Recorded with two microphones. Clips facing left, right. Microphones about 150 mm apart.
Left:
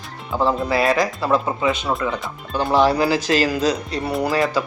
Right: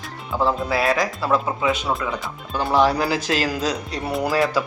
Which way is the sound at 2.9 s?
Centre (ahead or behind).